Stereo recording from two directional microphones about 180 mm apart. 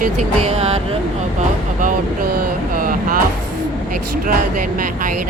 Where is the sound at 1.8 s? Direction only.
50° right (ahead or behind).